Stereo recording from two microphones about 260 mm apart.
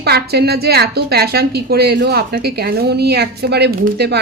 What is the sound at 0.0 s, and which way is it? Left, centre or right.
A woman's voice, right.